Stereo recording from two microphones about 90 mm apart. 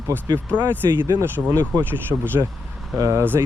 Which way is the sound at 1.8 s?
25° right (ahead or behind).